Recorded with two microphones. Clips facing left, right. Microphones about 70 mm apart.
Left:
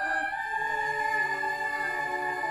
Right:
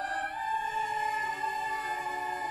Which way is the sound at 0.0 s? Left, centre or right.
Left.